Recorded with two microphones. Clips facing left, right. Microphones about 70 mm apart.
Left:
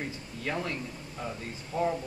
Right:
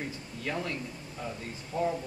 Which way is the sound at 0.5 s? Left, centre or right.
Centre.